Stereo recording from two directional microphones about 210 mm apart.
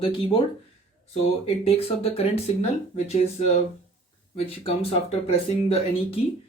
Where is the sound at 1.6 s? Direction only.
30° left (ahead or behind).